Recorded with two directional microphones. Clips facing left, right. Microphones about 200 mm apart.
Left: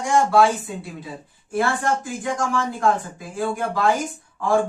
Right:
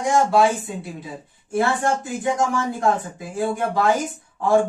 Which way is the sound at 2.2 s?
20° right (ahead or behind).